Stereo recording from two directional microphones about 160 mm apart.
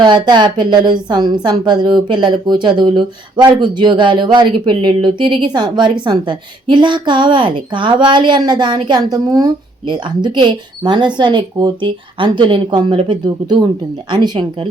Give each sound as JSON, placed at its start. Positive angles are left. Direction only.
{"t": 0.0, "sound": "a woman's voice", "side_deg": -30}